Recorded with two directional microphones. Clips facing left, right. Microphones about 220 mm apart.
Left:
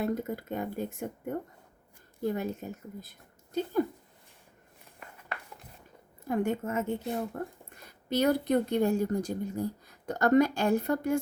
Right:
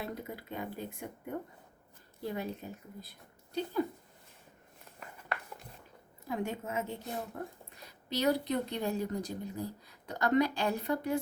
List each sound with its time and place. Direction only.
0.0 s a woman's voice: 45° left (ahead or behind)
6.2 s a woman's voice: 50° left (ahead or behind)